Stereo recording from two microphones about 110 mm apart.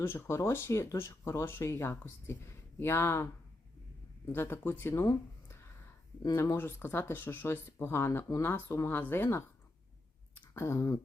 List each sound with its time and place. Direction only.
0.0 s speech: 25° left (ahead or behind)
4.3 s speech: 20° left (ahead or behind)
5.0 s a sound: 25° left (ahead or behind)
6.3 s speech: 25° left (ahead or behind)
10.5 s speech: 25° left (ahead or behind)